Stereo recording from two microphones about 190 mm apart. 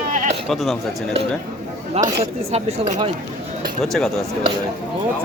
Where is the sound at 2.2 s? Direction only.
35° right (ahead or behind).